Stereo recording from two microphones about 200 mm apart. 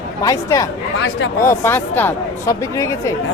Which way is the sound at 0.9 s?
65° left (ahead or behind).